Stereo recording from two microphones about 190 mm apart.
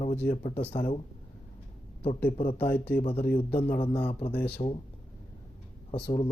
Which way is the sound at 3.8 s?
30° left (ahead or behind).